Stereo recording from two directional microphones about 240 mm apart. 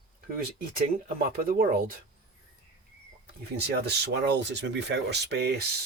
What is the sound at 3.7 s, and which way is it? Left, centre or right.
Speech, right.